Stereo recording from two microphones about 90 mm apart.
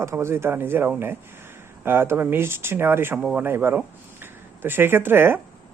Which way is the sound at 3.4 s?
25° right (ahead or behind).